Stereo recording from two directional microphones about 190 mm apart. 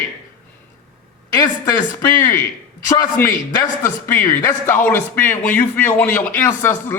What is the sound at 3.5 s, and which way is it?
Speech, 20° left (ahead or behind).